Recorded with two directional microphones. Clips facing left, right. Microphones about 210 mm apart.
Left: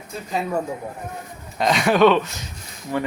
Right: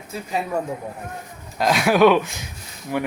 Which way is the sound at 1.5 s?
5° right (ahead or behind).